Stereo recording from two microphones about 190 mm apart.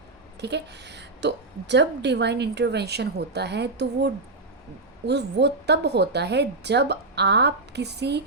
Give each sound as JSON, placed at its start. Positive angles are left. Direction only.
{"t": 0.3, "sound": "a woman's voice", "side_deg": -60}